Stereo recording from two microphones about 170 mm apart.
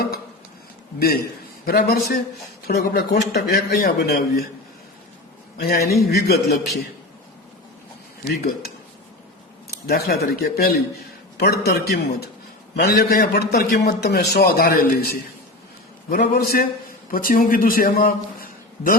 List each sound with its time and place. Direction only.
0.9 s a man's voice: 70° left (ahead or behind)
5.5 s a man's voice: 70° left (ahead or behind)
8.2 s a man's voice: 65° left (ahead or behind)